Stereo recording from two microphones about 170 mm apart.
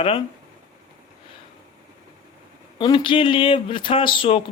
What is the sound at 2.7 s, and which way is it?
Speech, 30° left (ahead or behind).